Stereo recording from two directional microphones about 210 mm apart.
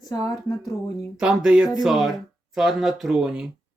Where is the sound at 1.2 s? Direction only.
5° right (ahead or behind).